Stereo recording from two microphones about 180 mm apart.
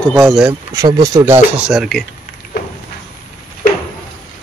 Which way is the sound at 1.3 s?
5° right (ahead or behind).